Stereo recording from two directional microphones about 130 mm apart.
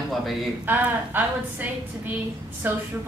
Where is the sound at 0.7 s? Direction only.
15° right (ahead or behind).